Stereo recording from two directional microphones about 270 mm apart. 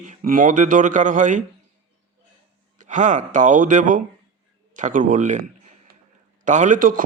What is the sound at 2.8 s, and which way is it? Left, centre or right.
A man's voice, right.